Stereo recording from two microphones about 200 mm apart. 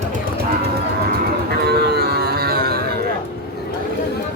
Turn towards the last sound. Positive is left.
turn(degrees=-50)  # may be behind; listen again after turning